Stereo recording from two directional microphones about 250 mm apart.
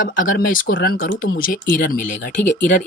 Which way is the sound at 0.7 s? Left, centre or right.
Left.